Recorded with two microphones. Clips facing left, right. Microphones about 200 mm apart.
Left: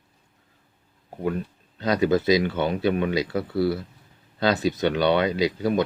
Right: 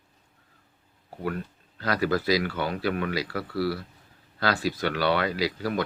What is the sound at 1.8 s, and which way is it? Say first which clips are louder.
Speech: left 5 dB; 20° left (ahead or behind).